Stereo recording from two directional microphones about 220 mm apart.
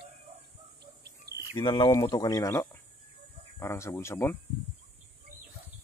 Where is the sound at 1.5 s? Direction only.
20° left (ahead or behind).